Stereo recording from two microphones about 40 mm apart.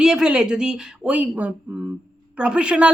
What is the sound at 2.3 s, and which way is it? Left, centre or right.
Speech, right.